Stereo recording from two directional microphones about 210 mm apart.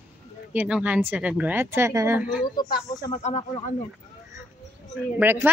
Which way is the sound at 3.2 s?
35° left (ahead or behind).